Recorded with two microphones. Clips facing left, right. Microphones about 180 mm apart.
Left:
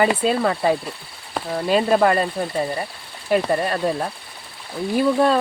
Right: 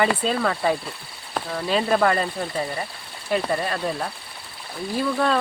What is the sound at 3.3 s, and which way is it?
Speech, 40° left (ahead or behind).